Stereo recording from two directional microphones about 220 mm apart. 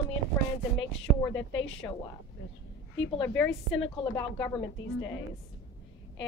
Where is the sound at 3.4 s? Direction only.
60° left (ahead or behind).